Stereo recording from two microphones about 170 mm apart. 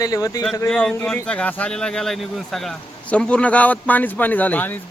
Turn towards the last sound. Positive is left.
turn(degrees=10)  # may be behind; listen again after turning